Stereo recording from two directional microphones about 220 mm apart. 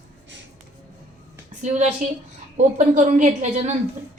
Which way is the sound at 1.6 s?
35° right (ahead or behind).